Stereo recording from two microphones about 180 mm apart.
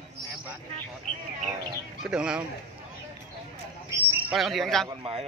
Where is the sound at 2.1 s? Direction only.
5° right (ahead or behind).